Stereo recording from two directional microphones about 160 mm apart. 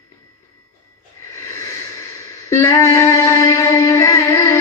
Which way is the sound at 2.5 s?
20° left (ahead or behind).